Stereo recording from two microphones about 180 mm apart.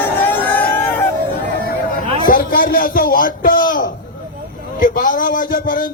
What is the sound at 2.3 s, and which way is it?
A man's voice, 55° left (ahead or behind).